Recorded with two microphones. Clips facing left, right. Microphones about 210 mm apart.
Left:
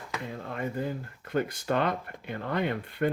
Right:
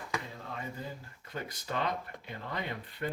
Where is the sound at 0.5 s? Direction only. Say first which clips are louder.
Left 9 dB; 65° left (ahead or behind).